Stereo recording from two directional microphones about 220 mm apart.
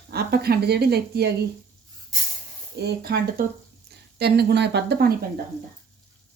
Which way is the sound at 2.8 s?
45° right (ahead or behind).